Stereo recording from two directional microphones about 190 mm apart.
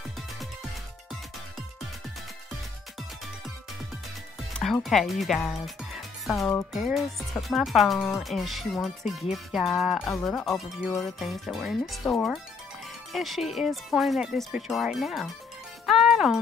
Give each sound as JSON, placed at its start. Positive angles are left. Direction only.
{"t": 4.6, "sound": "speech", "side_deg": 5}
{"t": 5.9, "sound": "music", "side_deg": 0}
{"t": 6.7, "sound": "speech", "side_deg": 0}
{"t": 11.1, "sound": "speech", "side_deg": 0}
{"t": 15.8, "sound": "music", "side_deg": 0}